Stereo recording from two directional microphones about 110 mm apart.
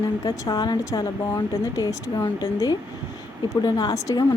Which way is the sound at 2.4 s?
40° left (ahead or behind).